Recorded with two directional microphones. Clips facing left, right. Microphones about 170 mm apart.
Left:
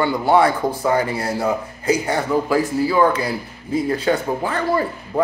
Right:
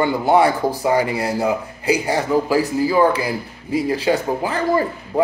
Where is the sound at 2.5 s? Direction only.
35° right (ahead or behind).